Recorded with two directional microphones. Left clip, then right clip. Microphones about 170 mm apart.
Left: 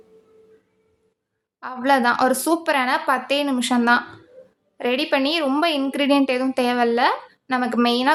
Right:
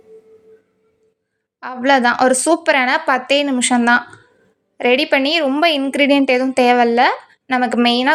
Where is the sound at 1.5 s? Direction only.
20° right (ahead or behind).